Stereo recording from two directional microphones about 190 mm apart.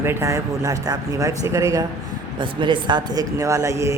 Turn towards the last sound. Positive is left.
turn(degrees=-15)  # may be behind; listen again after turning